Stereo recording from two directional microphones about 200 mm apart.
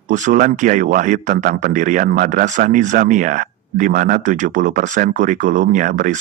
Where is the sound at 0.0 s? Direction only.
40° right (ahead or behind).